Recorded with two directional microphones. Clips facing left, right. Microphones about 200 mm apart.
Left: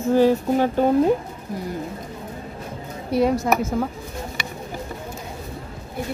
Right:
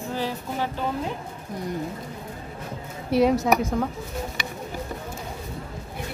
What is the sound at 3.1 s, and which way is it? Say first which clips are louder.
Speech: even; centre (ahead or behind).